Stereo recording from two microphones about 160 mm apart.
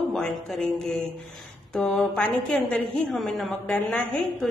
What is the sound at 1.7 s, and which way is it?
A woman's voice, 5° left (ahead or behind).